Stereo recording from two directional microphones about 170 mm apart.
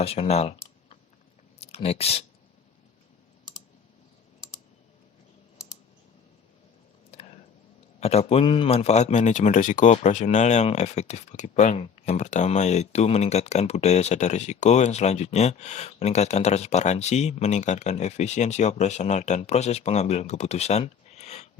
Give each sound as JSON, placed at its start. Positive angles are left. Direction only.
{"t": 0.0, "sound": "speech", "side_deg": 35}
{"t": 1.5, "sound": "speech", "side_deg": 35}
{"t": 7.1, "sound": "clicking", "side_deg": 40}
{"t": 7.9, "sound": "speech", "side_deg": 40}